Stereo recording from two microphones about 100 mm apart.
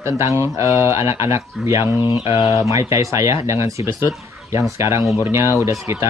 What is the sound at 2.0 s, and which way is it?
Speech, 60° left (ahead or behind).